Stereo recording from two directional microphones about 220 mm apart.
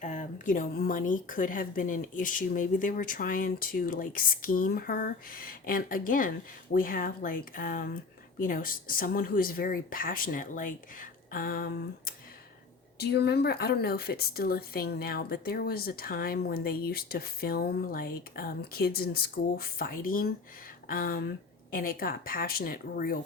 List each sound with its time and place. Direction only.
0.0 s a woman's voice: 35° left (ahead or behind)